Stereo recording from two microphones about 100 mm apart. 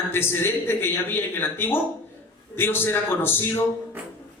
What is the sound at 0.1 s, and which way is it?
Speech, 25° left (ahead or behind).